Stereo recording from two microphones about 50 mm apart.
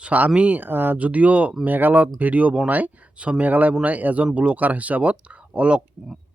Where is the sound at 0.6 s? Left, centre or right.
Right.